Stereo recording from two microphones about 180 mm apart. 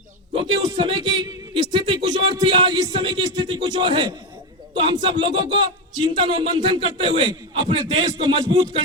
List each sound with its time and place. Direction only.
0.3 s a man's voice: 30° right (ahead or behind)
2.0 s music: 25° right (ahead or behind)
4.8 s speech: 30° right (ahead or behind)